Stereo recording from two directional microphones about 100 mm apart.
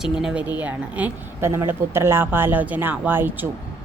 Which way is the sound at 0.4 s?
15° right (ahead or behind).